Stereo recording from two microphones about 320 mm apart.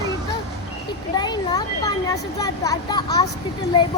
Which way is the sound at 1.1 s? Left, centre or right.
Centre.